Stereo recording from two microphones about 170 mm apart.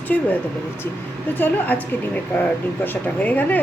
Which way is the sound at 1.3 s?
10° left (ahead or behind).